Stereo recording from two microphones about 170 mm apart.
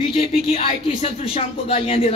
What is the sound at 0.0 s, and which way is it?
Speech, 35° left (ahead or behind).